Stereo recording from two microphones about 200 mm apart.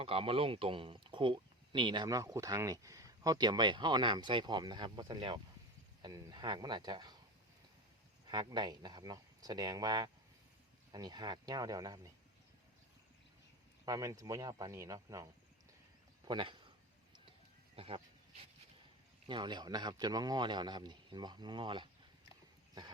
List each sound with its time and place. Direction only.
0.0 s speech: 30° right (ahead or behind)
8.3 s speech: 20° right (ahead or behind)
13.8 s speech: 15° right (ahead or behind)
17.7 s a sound: 30° right (ahead or behind)
19.3 s speech: 20° right (ahead or behind)